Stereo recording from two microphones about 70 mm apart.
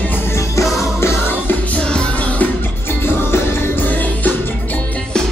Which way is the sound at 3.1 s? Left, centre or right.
Left.